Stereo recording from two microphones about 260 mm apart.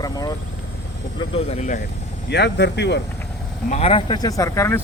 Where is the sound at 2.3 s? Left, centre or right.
Left.